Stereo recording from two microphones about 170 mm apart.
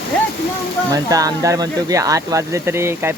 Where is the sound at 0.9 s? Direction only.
20° right (ahead or behind).